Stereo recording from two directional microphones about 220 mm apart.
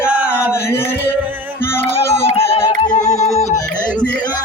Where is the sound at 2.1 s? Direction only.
25° left (ahead or behind).